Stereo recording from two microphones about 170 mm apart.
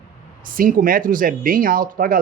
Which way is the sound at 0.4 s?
55° right (ahead or behind).